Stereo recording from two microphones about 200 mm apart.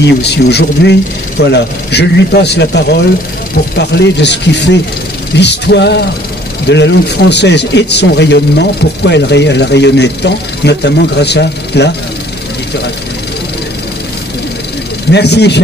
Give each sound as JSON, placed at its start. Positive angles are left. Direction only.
{"t": 0.0, "sound": "speech", "side_deg": 55}
{"t": 15.0, "sound": "speech", "side_deg": 55}